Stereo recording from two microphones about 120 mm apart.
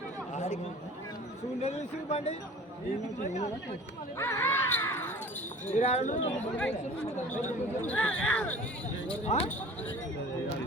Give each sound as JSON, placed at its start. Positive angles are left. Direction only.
{"t": 1.6, "sound": "speech", "side_deg": 65}
{"t": 4.2, "sound": "a sound", "side_deg": 20}
{"t": 5.7, "sound": "speech", "side_deg": 75}
{"t": 7.3, "sound": "speech", "side_deg": 90}
{"t": 7.9, "sound": "speech", "side_deg": 10}
{"t": 9.2, "sound": "speech", "side_deg": 65}